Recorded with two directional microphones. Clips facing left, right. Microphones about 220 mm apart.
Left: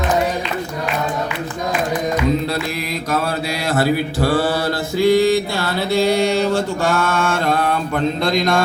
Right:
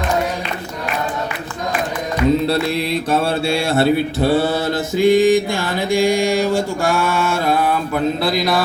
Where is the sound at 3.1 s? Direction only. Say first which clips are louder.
Right 3 dB; 25° right (ahead or behind).